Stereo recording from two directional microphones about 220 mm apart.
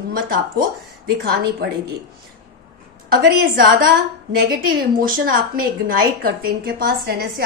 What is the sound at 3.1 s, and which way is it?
A woman's voice, 45° right (ahead or behind).